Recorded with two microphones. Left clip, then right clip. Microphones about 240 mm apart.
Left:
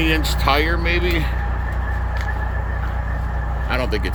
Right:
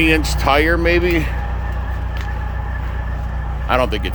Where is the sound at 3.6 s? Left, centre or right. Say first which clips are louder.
Right 6 dB; centre.